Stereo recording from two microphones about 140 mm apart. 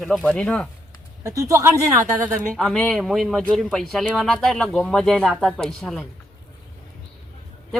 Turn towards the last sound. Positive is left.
turn(degrees=0)  # may be behind; listen again after turning